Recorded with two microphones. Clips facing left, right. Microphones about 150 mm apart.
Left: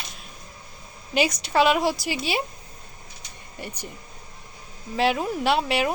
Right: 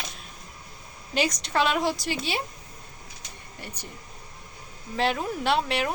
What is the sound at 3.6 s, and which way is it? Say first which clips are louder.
Speech: left 5 dB; 10° left (ahead or behind).